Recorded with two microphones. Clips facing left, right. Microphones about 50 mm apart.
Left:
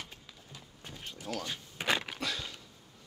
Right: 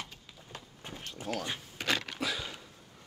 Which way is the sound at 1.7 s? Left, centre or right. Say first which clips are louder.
Left 2 dB; centre.